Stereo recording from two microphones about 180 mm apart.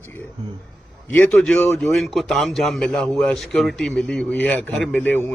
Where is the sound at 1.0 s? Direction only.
10° left (ahead or behind).